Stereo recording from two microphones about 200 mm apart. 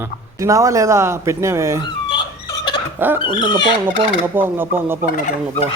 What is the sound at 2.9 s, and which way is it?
Speech, 10° right (ahead or behind).